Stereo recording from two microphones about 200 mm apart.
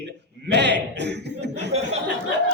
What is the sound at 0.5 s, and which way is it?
Chuckle, 60° right (ahead or behind).